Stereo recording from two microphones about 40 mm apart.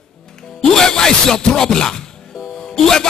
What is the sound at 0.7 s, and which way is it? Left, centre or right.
Music, centre.